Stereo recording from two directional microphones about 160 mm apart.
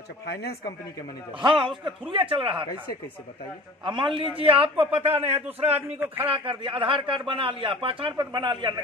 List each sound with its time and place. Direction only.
0.3 s speech: 90° left
1.4 s a man's voice: 30° right (ahead or behind)
3.8 s a man's voice: 30° right (ahead or behind)
5.9 s a man's voice: 10° right (ahead or behind)
6.2 s a man's voice: 35° right (ahead or behind)